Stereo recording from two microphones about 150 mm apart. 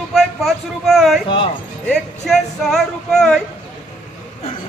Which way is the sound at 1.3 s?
35° left (ahead or behind).